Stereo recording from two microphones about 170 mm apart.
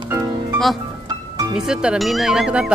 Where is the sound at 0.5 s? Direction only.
Centre (ahead or behind).